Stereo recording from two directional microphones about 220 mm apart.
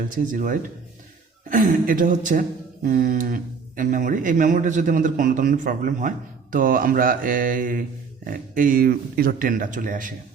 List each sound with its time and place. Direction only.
0.3 s speech: 35° right (ahead or behind)